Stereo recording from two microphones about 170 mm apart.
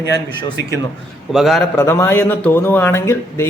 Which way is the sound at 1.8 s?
15° left (ahead or behind).